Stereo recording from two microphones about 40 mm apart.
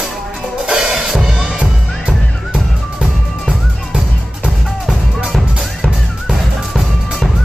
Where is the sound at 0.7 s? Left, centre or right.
Centre.